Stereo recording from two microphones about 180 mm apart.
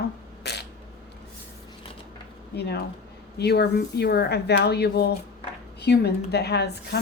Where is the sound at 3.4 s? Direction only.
65° left (ahead or behind).